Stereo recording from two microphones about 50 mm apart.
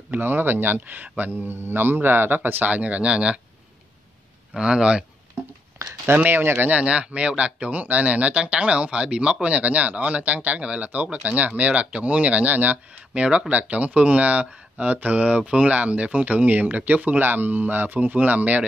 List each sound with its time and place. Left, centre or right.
0.1 s speech: right
0.7 s speech: right
1.3 s speech: right
2.7 s speech: right
4.6 s speech: centre
6.0 s speech: right
6.7 s speech: right
13.1 s speech: right